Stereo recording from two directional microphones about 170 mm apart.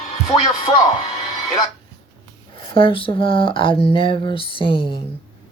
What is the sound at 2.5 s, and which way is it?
Speech, 35° left (ahead or behind).